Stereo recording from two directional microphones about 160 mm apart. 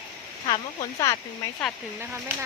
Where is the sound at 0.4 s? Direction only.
25° left (ahead or behind).